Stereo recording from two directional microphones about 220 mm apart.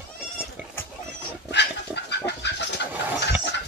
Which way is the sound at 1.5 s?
50° left (ahead or behind).